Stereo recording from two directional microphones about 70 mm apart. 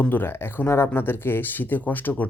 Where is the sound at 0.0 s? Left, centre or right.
Left.